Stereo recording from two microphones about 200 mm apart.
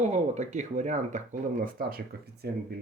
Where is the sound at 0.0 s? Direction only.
35° right (ahead or behind).